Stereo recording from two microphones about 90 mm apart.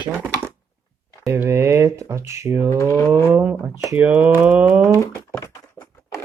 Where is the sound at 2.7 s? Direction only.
35° left (ahead or behind).